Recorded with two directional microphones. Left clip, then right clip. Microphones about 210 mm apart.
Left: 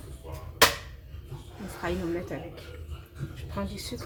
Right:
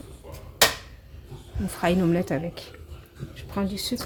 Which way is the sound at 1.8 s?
50° right (ahead or behind).